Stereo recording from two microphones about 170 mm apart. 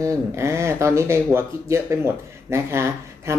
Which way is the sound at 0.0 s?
15° right (ahead or behind).